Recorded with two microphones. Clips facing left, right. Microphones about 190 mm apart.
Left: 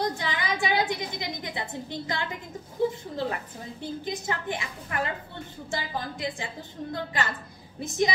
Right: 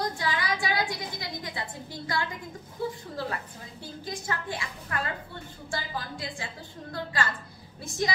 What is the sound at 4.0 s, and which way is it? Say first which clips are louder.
A woman's voice: even; 20° left (ahead or behind).